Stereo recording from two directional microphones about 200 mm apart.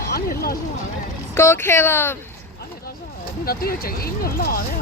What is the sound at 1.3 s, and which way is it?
Speech, 15° left (ahead or behind).